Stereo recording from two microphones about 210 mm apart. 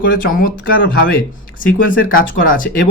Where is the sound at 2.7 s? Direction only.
45° left (ahead or behind).